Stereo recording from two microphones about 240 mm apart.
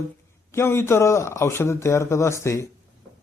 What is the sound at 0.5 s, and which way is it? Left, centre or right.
Speech, centre.